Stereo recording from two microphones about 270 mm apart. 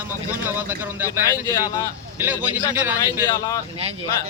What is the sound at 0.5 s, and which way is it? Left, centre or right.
Speech, centre.